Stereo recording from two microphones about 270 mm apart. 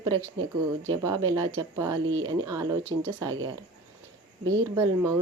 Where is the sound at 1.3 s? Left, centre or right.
Centre.